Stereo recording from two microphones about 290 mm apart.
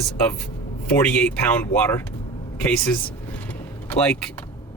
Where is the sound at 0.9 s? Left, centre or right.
Centre.